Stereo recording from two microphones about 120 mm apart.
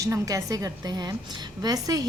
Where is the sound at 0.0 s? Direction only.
25° right (ahead or behind).